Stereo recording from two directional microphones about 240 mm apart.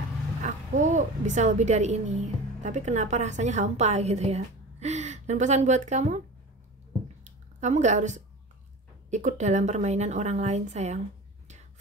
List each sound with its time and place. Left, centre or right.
0.4 s a woman's voice: right
7.6 s a woman's voice: right